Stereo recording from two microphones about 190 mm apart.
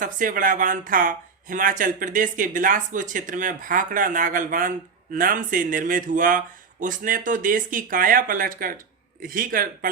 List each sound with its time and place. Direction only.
0.0 s speech: 45° right (ahead or behind)